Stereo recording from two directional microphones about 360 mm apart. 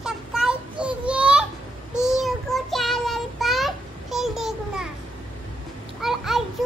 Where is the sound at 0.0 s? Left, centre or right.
Centre.